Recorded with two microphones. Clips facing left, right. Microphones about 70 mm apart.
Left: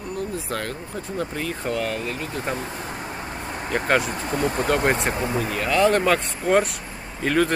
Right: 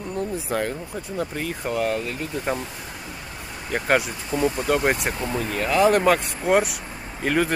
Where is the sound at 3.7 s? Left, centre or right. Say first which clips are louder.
Left 1 dB; centre.